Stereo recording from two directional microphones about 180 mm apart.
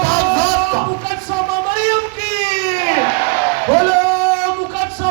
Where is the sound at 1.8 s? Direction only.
20° right (ahead or behind).